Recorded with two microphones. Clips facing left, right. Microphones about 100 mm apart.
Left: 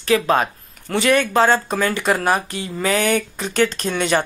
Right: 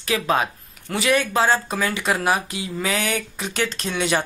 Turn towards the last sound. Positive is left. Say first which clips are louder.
# left 3 dB
turn(degrees=0)  # may be behind; listen again after turning